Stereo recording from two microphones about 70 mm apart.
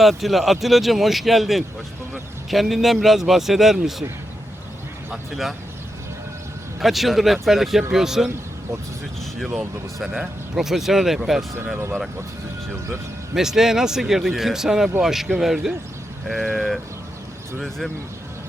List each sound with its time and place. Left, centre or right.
0.0 s speech: centre
5.1 s speech: centre
6.7 s speech: centre
9.2 s a sound: centre
9.6 s speech: centre
13.3 s speech: centre
16.2 s speech: centre